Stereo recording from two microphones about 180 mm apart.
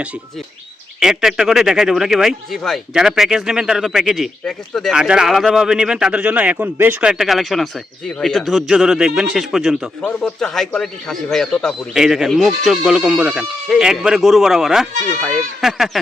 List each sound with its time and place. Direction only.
0.9 s speech: 5° right (ahead or behind)
14.9 s speech: 45° right (ahead or behind)
15.6 s speech: centre (ahead or behind)